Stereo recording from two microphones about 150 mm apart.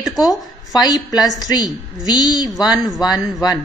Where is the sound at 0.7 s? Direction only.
25° left (ahead or behind).